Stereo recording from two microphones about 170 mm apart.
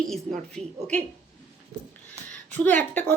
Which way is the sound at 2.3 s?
10° left (ahead or behind).